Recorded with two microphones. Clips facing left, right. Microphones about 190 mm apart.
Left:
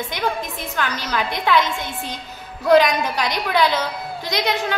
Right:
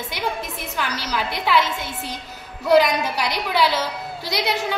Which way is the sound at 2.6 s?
5° right (ahead or behind).